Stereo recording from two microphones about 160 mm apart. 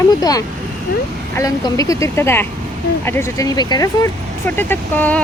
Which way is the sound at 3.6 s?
25° left (ahead or behind).